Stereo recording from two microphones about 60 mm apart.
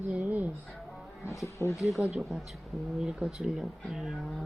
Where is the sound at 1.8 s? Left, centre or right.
Centre.